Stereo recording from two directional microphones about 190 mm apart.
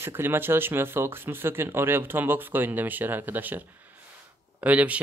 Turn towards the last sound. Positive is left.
turn(degrees=-5)  # may be behind; listen again after turning